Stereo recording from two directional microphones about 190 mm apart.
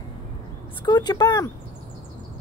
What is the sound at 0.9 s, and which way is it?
Speech, 20° left (ahead or behind).